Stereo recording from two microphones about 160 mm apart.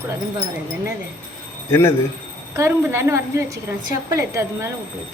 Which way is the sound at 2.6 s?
15° right (ahead or behind).